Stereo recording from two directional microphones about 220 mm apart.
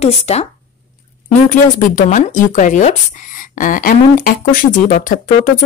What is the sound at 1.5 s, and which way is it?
Speech, 35° left (ahead or behind).